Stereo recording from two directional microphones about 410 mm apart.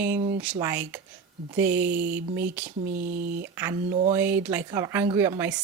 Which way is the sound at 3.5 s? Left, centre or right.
Centre.